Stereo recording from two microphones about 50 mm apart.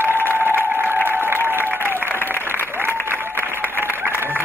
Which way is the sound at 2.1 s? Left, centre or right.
Left.